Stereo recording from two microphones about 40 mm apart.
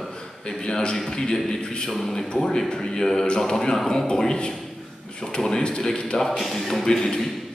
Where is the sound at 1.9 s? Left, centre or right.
Centre.